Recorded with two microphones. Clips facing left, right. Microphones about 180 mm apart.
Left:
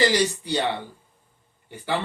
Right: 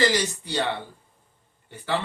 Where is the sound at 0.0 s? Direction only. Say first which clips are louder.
Left 2 dB; 15° left (ahead or behind).